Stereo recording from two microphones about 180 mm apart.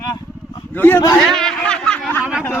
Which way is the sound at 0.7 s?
10° left (ahead or behind).